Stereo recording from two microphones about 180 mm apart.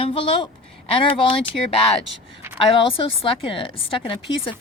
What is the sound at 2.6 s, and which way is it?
A woman's voice, 30° left (ahead or behind).